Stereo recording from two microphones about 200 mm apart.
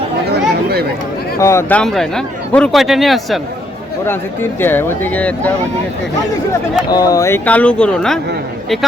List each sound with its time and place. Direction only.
0.3 s chatter: 50° right (ahead or behind)
1.4 s speech: 15° left (ahead or behind)
1.8 s speech: centre (ahead or behind)
4.6 s speech: 10° left (ahead or behind)
6.9 s speech: 20° left (ahead or behind); by 8.2 s 5° left (ahead or behind)